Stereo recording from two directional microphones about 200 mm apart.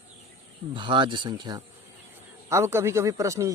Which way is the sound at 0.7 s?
25° right (ahead or behind).